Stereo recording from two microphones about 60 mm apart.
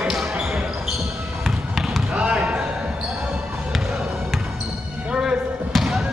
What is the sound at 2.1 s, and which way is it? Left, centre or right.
Basketball bounce, centre.